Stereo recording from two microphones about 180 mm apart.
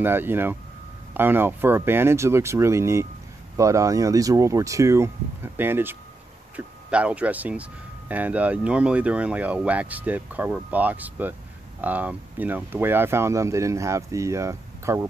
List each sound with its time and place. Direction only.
0.0 s speech: 10° right (ahead or behind)